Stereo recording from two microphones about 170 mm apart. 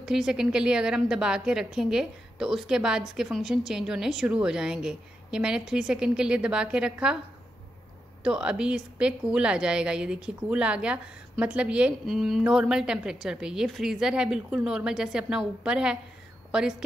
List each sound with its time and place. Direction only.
0.0 s a woman's voice: 5° right (ahead or behind)
8.2 s a woman's voice: 5° right (ahead or behind)